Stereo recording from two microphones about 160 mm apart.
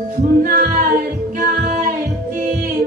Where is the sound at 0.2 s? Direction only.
60° right (ahead or behind).